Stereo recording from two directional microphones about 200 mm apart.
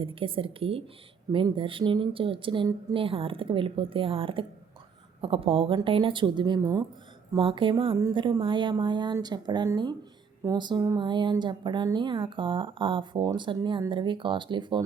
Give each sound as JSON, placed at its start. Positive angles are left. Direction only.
{"t": 0.0, "sound": "speech", "side_deg": -25}